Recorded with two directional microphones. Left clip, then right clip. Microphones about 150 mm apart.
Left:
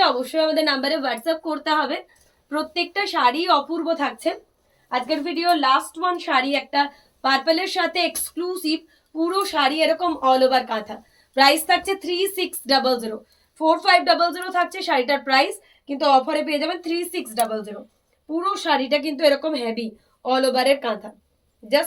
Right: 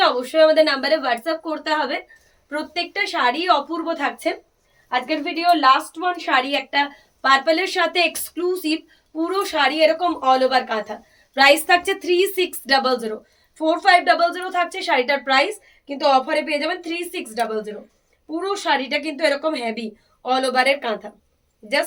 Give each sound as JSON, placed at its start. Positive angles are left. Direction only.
{"t": 0.0, "sound": "a woman's voice", "side_deg": -30}